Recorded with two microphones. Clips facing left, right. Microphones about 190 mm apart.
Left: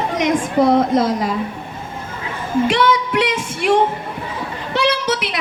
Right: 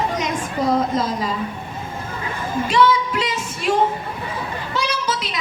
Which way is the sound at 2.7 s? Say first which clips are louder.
Left 1 dB; 75° left (ahead or behind).